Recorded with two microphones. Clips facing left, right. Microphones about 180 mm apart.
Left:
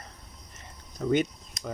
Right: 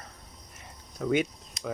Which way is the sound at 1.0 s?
Centre (ahead or behind).